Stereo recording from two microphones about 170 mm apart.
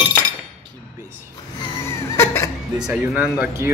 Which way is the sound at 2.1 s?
15° left (ahead or behind).